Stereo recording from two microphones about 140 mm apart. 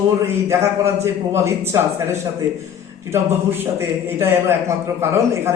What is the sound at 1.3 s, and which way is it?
A man's voice, 20° right (ahead or behind).